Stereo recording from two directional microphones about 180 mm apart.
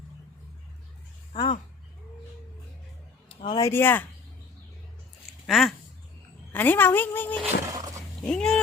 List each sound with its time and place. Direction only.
1.3 s speech: 35° left (ahead or behind)
3.2 s a sound: 25° left (ahead or behind)
3.7 s a woman's voice: 10° left (ahead or behind)
5.5 s speech: centre (ahead or behind)
6.5 s a woman's voice: 10° left (ahead or behind)
7.4 s roaring cats: 20° right (ahead or behind)
8.3 s speech: 5° left (ahead or behind)